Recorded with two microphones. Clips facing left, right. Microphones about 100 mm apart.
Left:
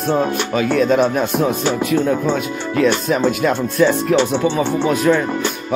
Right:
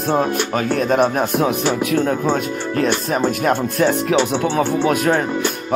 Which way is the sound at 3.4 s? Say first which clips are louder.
Left 2 dB; 60° right (ahead or behind).